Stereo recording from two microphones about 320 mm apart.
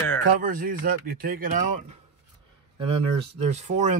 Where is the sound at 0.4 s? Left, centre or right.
Right.